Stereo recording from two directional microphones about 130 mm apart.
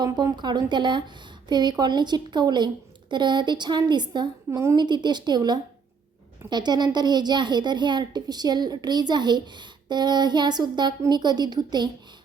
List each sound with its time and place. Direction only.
0.0 s speech: 30° right (ahead or behind)